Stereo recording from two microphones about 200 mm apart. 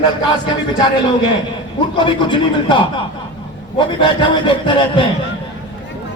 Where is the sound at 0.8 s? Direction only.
25° left (ahead or behind).